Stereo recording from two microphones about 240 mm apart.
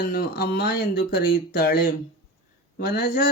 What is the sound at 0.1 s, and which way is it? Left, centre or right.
Speech, left.